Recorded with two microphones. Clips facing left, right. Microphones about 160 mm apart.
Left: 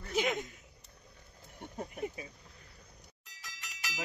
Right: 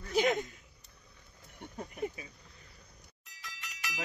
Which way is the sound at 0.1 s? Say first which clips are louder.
Right 4 dB; 35° right (ahead or behind).